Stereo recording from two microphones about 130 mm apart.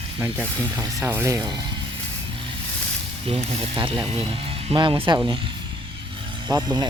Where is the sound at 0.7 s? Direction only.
30° right (ahead or behind).